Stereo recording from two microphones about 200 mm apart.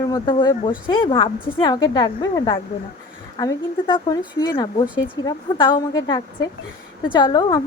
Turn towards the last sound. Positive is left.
turn(degrees=20)  # may be behind; listen again after turning